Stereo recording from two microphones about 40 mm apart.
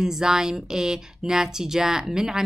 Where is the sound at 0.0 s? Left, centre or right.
Centre.